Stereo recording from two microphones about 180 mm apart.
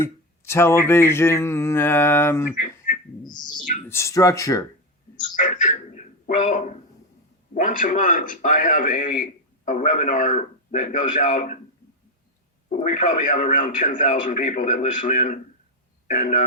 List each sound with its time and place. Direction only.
0.0 s speech: 15° left (ahead or behind)
3.2 s a sound: 25° left (ahead or behind)
3.6 s a man's voice: 45° left (ahead or behind)
3.8 s speech: 15° left (ahead or behind)
5.4 s a man's voice: 45° left (ahead or behind)
12.6 s a man's voice: 45° left (ahead or behind)